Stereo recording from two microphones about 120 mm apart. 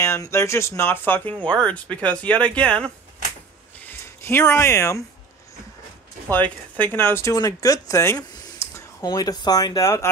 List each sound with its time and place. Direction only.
0.0 s speech: 20° left (ahead or behind)
3.8 s speech: 20° left (ahead or behind)
6.3 s speech: 15° left (ahead or behind)